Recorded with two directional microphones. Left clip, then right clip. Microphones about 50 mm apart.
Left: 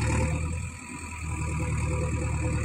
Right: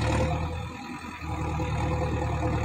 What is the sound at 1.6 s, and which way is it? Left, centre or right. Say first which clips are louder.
Vehicle: right 5 dB; centre.